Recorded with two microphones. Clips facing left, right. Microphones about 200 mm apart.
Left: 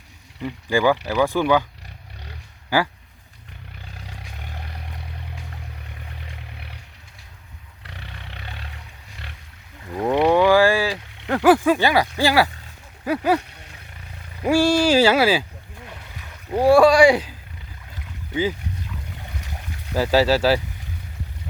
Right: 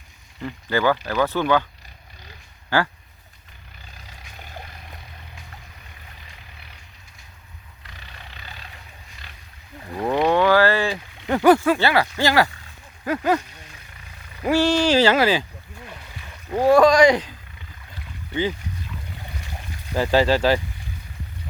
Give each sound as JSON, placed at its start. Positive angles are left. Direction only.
{"t": 0.4, "sound": "speech", "side_deg": 10}
{"t": 2.6, "sound": "speech", "side_deg": 10}
{"t": 6.1, "sound": "vehicle", "side_deg": 70}
{"t": 7.9, "sound": "roar", "side_deg": 70}
{"t": 10.1, "sound": "vehicle", "side_deg": 10}
{"t": 13.1, "sound": "speech", "side_deg": 10}
{"t": 14.4, "sound": "speech", "side_deg": 10}
{"t": 16.5, "sound": "speech", "side_deg": 10}
{"t": 19.9, "sound": "speech", "side_deg": 5}